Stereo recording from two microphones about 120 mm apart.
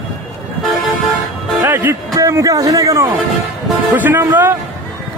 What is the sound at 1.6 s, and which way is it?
Music, 20° right (ahead or behind).